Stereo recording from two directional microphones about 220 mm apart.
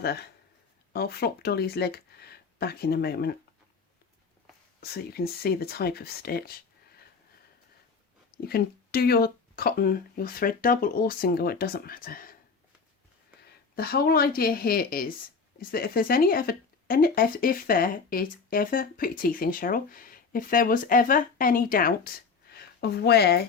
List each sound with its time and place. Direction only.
0.0 s speech: 45° left (ahead or behind)
4.8 s speech: 45° left (ahead or behind)
8.4 s speech: 45° left (ahead or behind)
13.7 s speech: 45° left (ahead or behind)